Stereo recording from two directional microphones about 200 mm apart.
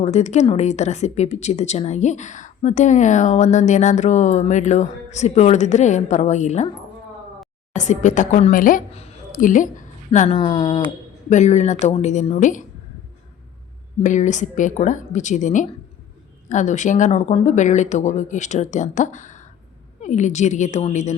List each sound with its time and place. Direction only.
0.0 s speech: 35° left (ahead or behind)
7.7 s speech: 35° left (ahead or behind)
11.3 s speech: 35° left (ahead or behind)
14.0 s speech: 40° left (ahead or behind)